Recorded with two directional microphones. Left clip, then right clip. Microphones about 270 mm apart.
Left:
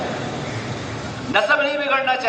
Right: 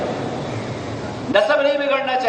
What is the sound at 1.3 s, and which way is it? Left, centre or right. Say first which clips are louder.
Speech: right 2 dB; centre.